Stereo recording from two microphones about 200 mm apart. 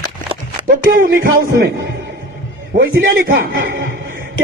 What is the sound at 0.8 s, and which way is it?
Speech, 45° right (ahead or behind).